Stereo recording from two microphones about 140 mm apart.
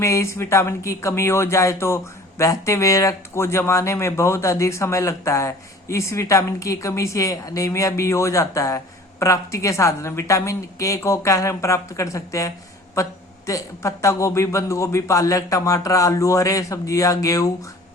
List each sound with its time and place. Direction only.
0.0 s speech: 20° left (ahead or behind)